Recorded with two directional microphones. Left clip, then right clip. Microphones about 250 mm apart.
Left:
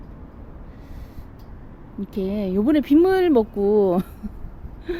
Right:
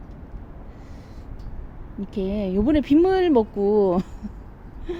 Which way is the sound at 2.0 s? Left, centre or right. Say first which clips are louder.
Left 1 dB; centre.